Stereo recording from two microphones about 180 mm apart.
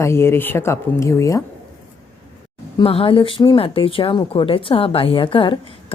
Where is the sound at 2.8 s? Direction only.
30° left (ahead or behind).